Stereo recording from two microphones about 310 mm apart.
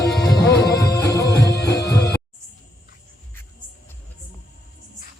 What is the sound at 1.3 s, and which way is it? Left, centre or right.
Music, left.